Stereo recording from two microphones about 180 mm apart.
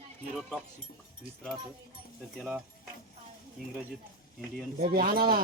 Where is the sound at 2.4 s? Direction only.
5° right (ahead or behind).